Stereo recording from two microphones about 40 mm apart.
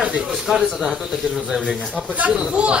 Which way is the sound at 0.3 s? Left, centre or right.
Centre.